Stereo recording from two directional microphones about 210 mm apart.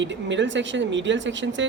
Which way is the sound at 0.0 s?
60° right (ahead or behind).